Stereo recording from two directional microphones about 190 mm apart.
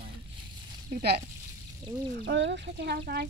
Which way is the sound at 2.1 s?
65° right (ahead or behind).